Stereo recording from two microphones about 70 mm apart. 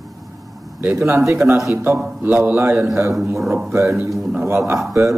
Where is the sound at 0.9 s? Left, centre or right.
Right.